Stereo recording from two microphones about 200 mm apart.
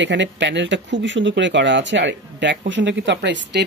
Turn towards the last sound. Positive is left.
turn(degrees=-60)  # may be behind; listen again after turning